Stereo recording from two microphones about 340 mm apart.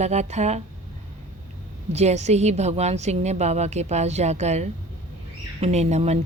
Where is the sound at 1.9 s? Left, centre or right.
Centre.